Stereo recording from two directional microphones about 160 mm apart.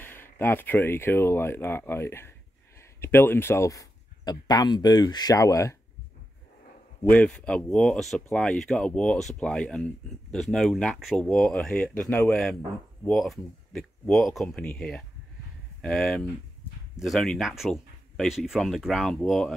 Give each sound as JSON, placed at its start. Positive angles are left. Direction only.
{"t": 0.0, "sound": "speech", "side_deg": 15}
{"t": 7.1, "sound": "speech", "side_deg": 5}